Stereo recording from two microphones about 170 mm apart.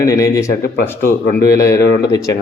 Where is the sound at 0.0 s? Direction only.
20° left (ahead or behind).